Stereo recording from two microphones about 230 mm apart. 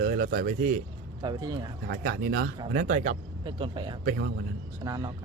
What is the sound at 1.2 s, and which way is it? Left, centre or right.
Speech, centre.